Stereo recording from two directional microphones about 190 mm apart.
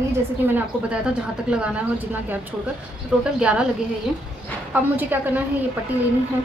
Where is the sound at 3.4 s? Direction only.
5° right (ahead or behind).